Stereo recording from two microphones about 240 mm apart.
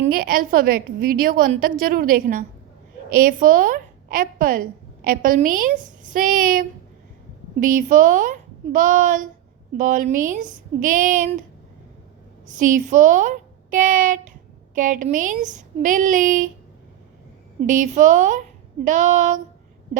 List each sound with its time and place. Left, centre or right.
0.0 s a woman's voice: right
12.5 s a woman's voice: right
17.7 s a woman's voice: right